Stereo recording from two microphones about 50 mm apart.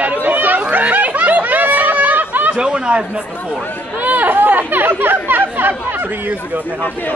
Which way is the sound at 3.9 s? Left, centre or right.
Right.